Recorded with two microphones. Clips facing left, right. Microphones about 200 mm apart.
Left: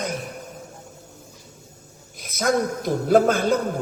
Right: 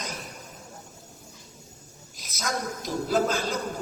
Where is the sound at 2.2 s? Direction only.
55° left (ahead or behind).